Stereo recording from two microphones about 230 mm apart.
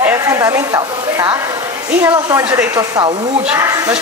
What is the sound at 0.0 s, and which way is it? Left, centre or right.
A man's voice, centre.